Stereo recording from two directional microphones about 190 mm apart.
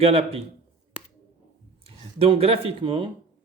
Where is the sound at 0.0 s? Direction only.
30° right (ahead or behind).